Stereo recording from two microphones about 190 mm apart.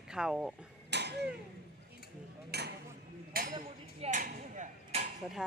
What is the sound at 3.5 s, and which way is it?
Hammer, 35° right (ahead or behind).